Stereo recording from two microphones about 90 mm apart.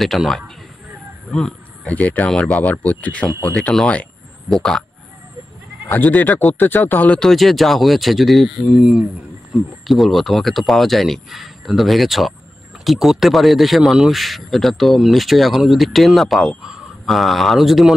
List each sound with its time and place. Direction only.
0.0 s speech: centre (ahead or behind)
1.3 s a sound: 10° left (ahead or behind)
2.0 s speech: 20° left (ahead or behind)
5.9 s speech: 20° left (ahead or behind)
7.2 s speech: centre (ahead or behind)
8.6 s speech: 10° right (ahead or behind)